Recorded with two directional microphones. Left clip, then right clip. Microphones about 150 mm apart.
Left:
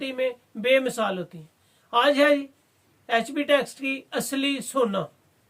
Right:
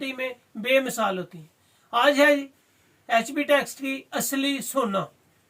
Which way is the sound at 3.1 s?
40° left (ahead or behind).